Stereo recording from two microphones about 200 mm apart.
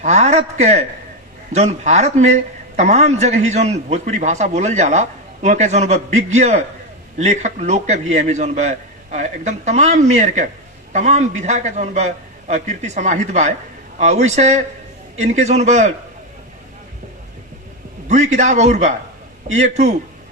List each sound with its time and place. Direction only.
0.0 s a man's voice: 35° right (ahead or behind)
18.1 s a man's voice: 35° right (ahead or behind)